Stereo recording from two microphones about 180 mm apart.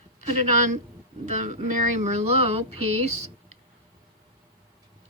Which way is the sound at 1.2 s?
40° right (ahead or behind).